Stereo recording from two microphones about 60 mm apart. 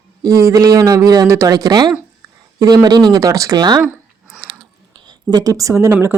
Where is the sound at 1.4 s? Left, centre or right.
Right.